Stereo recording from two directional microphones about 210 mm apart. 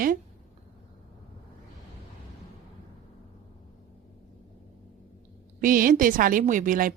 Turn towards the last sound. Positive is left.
turn(degrees=-40)  # may be behind; listen again after turning